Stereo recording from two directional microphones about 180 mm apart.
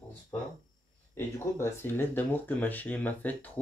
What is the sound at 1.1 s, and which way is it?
Speech, 15° left (ahead or behind).